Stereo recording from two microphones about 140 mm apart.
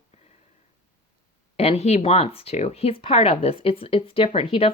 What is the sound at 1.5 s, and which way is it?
Speech, 45° left (ahead or behind).